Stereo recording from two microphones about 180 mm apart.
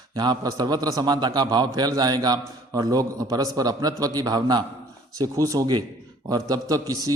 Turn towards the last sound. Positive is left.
turn(degrees=-20)  # may be behind; listen again after turning